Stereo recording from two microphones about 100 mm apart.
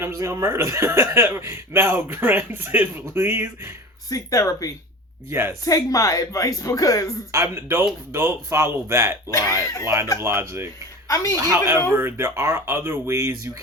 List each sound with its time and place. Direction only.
0.0 s speech: 30° right (ahead or behind)
4.1 s speech: 35° left (ahead or behind)
5.3 s speech: 20° right (ahead or behind)
5.6 s speech: 35° left (ahead or behind)
7.3 s speech: 30° right (ahead or behind)
9.3 s speech: 30° left (ahead or behind)
9.8 s speech: 25° right (ahead or behind)
11.1 s speech: 35° left (ahead or behind)
11.3 s speech: 30° right (ahead or behind)